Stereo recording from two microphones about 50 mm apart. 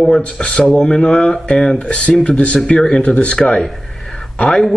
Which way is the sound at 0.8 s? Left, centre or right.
Centre.